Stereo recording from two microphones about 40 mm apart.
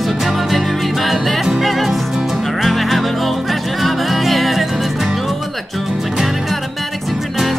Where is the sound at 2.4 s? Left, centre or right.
Centre.